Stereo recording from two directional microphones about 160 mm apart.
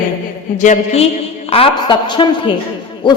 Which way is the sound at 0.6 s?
50° left (ahead or behind).